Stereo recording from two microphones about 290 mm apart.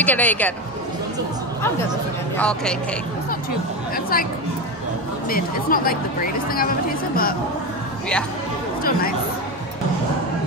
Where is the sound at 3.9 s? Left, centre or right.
Left.